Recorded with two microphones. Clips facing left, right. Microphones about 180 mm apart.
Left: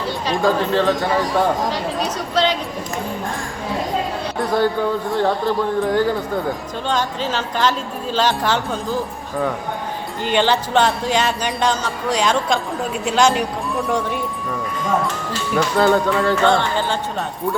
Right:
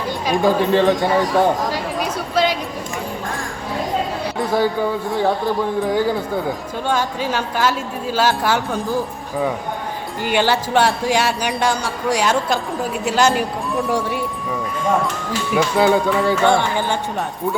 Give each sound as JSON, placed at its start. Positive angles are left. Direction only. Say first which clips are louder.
{"t": 0.3, "sound": "speech", "louder": "right 2 dB", "side_deg": -15}
{"t": 1.3, "sound": "a sound", "louder": "right 2 dB", "side_deg": -10}
{"t": 4.4, "sound": "a man's voice", "louder": "even", "side_deg": -5}
{"t": 10.2, "sound": "speech", "louder": "even", "side_deg": -10}
{"t": 15.3, "sound": "speech", "louder": "right 2 dB", "side_deg": -10}